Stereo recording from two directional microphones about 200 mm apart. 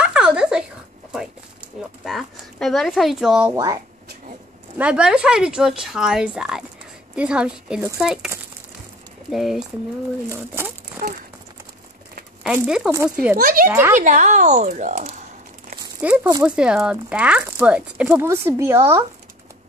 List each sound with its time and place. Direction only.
0.0 s a sound: 5° right (ahead or behind)
1.8 s speech: centre (ahead or behind)
3.5 s speech: 15° right (ahead or behind)
4.7 s speech: 5° right (ahead or behind)
9.3 s speech: centre (ahead or behind)
11.0 s speech: 45° right (ahead or behind)
12.4 s speech: 5° right (ahead or behind)
13.4 s speech: 45° right (ahead or behind)
13.7 s speech: 15° right (ahead or behind)
13.9 s speech: 40° right (ahead or behind)
16.0 s speech: 5° right (ahead or behind)